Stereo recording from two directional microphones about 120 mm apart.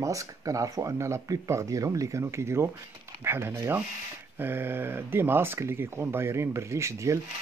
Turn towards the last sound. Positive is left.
turn(degrees=-25)  # may be behind; listen again after turning